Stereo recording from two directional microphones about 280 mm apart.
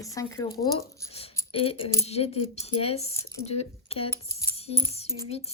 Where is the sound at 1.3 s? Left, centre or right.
Centre.